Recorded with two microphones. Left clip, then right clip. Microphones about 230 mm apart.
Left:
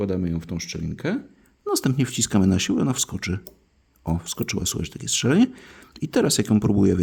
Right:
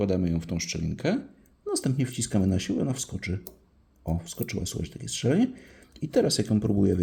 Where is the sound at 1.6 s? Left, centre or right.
Left.